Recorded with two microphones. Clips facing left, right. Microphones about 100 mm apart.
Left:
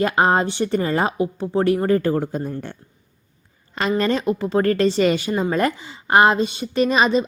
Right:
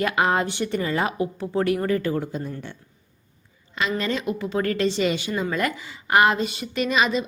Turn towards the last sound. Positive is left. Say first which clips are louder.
# left 5 dB
turn(degrees=35)  # may be behind; listen again after turning